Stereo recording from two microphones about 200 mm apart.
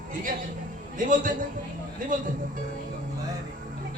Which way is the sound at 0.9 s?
40° right (ahead or behind).